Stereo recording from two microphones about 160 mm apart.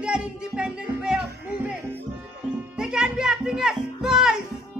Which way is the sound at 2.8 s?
5° right (ahead or behind).